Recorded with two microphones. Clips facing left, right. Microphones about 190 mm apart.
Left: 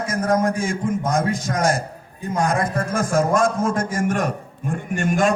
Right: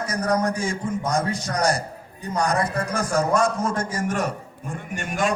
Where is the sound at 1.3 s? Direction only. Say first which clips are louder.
Left 2 dB; 90° left.